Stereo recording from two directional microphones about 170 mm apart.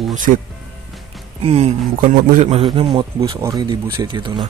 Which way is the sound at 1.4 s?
35° right (ahead or behind).